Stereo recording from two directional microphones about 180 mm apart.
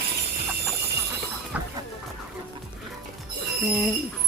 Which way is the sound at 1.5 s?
5° right (ahead or behind).